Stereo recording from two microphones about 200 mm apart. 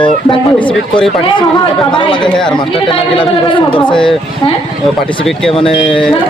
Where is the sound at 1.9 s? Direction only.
25° left (ahead or behind).